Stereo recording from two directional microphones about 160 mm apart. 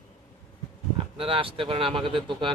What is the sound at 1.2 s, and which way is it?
Speech, 35° right (ahead or behind).